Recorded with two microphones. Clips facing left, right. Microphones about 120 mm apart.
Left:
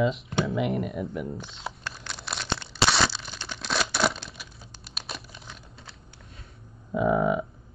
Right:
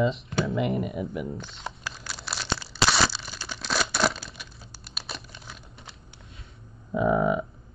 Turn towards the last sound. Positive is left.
turn(degrees=0)  # may be behind; listen again after turning